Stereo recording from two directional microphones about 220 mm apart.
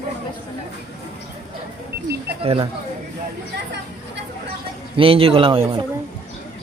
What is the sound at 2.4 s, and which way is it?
Speech, 25° right (ahead or behind).